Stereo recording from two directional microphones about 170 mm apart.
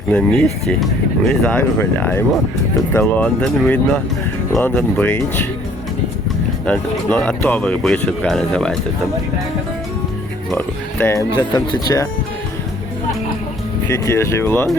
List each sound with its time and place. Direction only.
0.1 s speech: 5° left (ahead or behind)
6.7 s speech: 5° left (ahead or behind)
10.5 s speech: 10° left (ahead or behind)
13.9 s speech: 20° left (ahead or behind)